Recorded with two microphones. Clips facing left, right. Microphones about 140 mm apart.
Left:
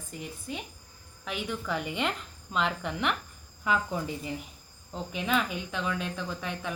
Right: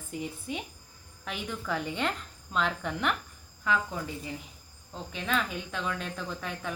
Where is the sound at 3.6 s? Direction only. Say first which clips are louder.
Left 1 dB; 15° left (ahead or behind); by 6.7 s centre (ahead or behind).